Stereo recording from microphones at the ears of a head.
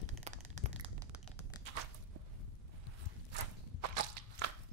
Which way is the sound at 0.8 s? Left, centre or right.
Right.